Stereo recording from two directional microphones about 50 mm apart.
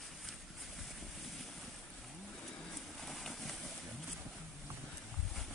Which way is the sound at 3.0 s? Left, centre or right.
Centre.